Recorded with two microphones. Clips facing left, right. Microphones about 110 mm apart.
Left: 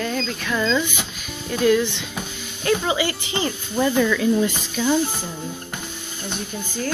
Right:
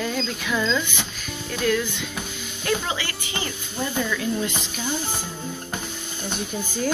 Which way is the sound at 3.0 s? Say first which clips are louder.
Left 6 dB; 25° left (ahead or behind).